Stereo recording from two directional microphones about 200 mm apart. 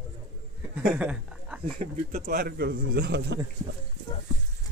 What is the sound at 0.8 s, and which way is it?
Speech, 5° right (ahead or behind).